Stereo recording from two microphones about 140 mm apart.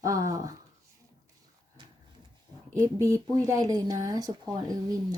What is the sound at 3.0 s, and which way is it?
A woman's voice, 25° right (ahead or behind).